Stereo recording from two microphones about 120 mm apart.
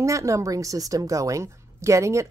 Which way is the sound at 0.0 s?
25° right (ahead or behind).